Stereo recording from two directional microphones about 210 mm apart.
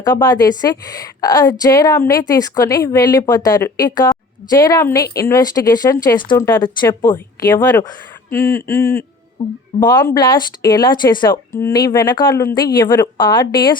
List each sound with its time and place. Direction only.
0.0 s speech: 20° left (ahead or behind)